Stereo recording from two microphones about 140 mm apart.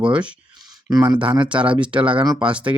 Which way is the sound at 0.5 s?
30° right (ahead or behind).